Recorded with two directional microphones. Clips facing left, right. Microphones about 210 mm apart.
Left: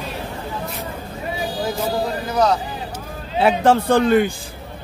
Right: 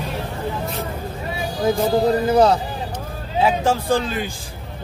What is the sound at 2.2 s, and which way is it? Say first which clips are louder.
Speech: right 2 dB; 30° right (ahead or behind).